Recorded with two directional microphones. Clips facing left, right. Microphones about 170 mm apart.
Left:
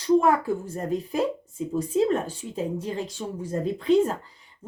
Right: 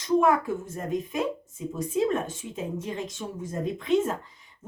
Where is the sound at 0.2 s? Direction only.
35° left (ahead or behind).